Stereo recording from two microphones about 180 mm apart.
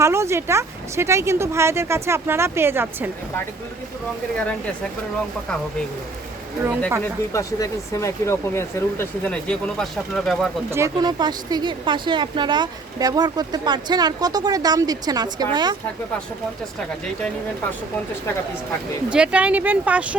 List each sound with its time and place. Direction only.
0.0 s speech: 15° right (ahead or behind)
7.3 s speech: 15° left (ahead or behind); by 10.5 s centre (ahead or behind)
10.7 s speech: 15° right (ahead or behind)
19.1 s speech: 5° right (ahead or behind)